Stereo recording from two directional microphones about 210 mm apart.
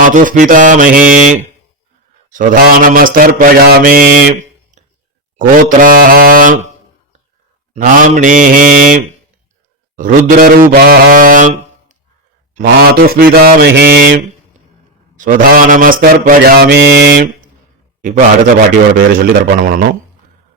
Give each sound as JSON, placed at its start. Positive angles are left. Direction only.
{"t": 0.0, "sound": "mantra", "side_deg": -40}
{"t": 7.7, "sound": "mantra", "side_deg": -35}
{"t": 9.9, "sound": "a sound", "side_deg": -40}
{"t": 12.5, "sound": "mantra", "side_deg": -40}
{"t": 15.1, "sound": "mantra", "side_deg": -40}
{"t": 18.0, "sound": "mantra", "side_deg": -40}